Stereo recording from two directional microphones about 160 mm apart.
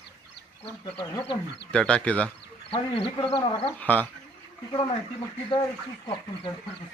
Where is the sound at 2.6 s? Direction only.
35° left (ahead or behind).